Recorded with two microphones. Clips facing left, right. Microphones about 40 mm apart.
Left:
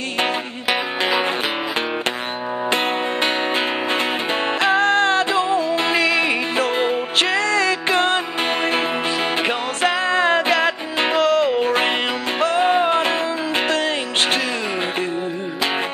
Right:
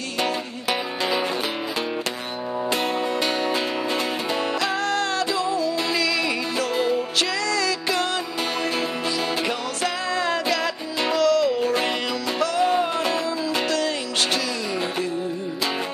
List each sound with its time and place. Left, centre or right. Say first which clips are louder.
2.7 s music: left 3 dB; left